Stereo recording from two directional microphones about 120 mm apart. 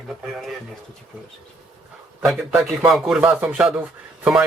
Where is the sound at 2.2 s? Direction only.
5° right (ahead or behind).